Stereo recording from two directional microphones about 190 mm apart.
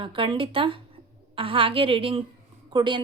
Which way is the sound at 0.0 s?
25° right (ahead or behind).